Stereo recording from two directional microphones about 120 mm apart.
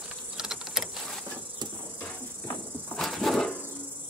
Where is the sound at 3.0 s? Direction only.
Centre (ahead or behind).